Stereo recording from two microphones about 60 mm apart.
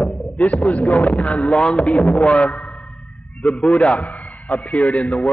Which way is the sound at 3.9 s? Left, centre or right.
Left.